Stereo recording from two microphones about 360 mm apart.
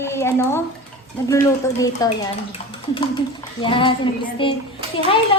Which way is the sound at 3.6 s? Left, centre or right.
Centre.